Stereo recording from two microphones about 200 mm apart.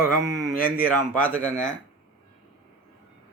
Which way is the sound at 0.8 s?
10° left (ahead or behind).